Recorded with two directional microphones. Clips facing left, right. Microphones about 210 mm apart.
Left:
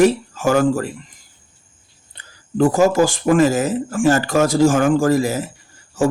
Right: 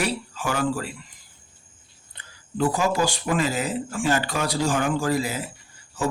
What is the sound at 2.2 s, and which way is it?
Speech, 45° left (ahead or behind).